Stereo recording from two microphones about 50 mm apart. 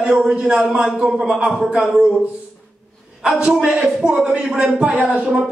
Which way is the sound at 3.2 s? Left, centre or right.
Centre.